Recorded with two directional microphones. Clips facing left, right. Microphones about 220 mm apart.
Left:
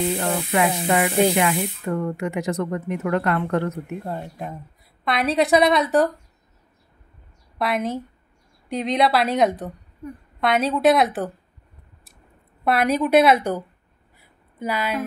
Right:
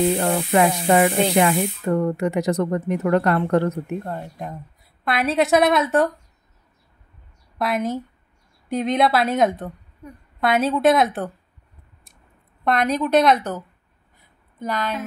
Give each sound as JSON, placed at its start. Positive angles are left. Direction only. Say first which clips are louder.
{"t": 0.5, "sound": "speech", "louder": "right 4 dB", "side_deg": -35}
{"t": 4.0, "sound": "a woman's voice", "louder": "even", "side_deg": 5}
{"t": 7.5, "sound": "a woman's voice", "louder": "right 1 dB", "side_deg": 0}
{"t": 12.6, "sound": "a woman's voice", "louder": "left 1 dB", "side_deg": 5}
{"t": 14.1, "sound": "a sound", "louder": "left 1 dB", "side_deg": 10}